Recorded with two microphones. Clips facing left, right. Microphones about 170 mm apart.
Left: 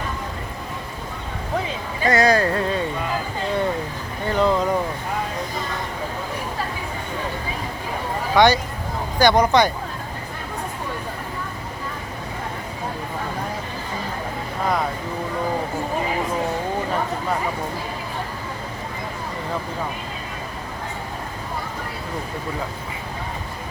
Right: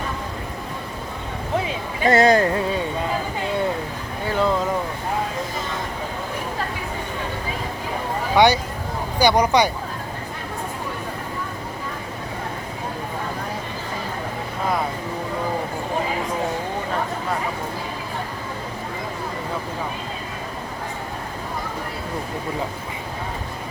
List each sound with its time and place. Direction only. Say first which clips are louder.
2.0 s speech: right 2 dB; 25° right (ahead or behind)
4.3 s a sound: left 2 dB; centre (ahead or behind)
8.4 s speech: even; 10° right (ahead or behind)